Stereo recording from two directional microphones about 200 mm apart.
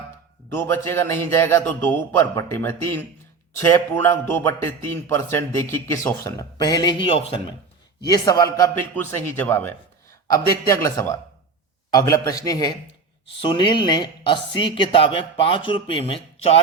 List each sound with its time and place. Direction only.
0.5 s a man's voice: 10° left (ahead or behind); by 16.6 s 30° left (ahead or behind)